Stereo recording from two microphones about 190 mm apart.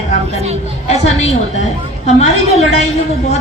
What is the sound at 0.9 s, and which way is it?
A woman's voice, 35° left (ahead or behind).